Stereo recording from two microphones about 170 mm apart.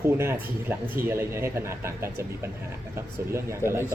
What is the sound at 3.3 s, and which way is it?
Speech, 15° right (ahead or behind).